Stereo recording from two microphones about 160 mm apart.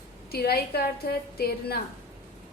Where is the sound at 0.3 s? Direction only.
75° left (ahead or behind).